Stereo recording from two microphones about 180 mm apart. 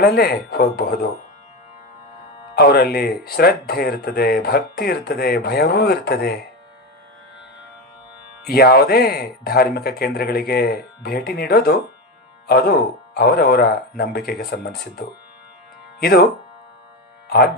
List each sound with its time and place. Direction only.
0.0 s speech: 60° left (ahead or behind)
2.6 s speech: 60° left (ahead or behind)
8.4 s speech: 60° left (ahead or behind)
17.2 s speech: 60° left (ahead or behind)